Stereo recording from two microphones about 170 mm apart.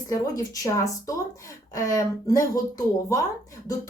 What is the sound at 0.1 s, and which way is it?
A woman's voice, 20° left (ahead or behind).